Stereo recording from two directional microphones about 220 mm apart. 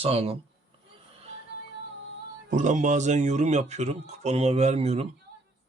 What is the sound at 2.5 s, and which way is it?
Speech, 35° right (ahead or behind).